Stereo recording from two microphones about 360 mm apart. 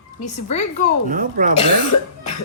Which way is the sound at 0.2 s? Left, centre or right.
Centre.